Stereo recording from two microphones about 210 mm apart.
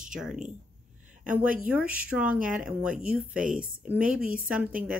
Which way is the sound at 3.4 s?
40° right (ahead or behind).